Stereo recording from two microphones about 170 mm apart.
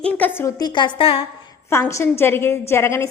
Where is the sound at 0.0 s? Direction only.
10° left (ahead or behind).